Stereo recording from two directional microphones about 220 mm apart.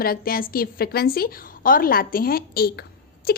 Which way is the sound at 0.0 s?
40° left (ahead or behind).